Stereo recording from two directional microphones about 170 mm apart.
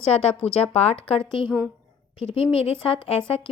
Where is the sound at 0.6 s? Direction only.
35° left (ahead or behind).